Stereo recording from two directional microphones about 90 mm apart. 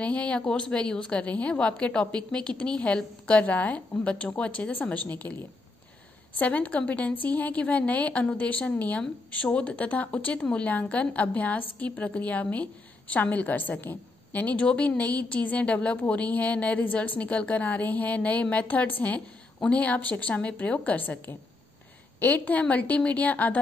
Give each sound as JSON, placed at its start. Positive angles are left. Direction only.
{"t": 0.0, "sound": "a woman's voice", "side_deg": 15}